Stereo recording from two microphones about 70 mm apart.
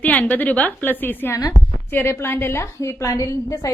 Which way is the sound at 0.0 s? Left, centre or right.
Left.